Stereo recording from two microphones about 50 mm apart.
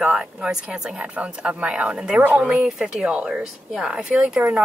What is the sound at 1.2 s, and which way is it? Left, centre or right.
A woman's voice, right.